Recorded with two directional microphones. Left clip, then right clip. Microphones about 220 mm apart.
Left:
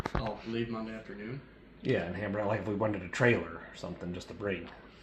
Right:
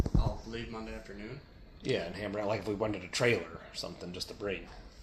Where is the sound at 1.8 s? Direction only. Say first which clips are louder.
Left 2 dB; 15° right (ahead or behind).